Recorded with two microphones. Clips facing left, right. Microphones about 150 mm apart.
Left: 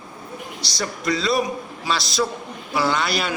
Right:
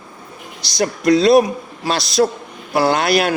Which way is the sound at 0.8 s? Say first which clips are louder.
Right 10 dB; 65° right (ahead or behind).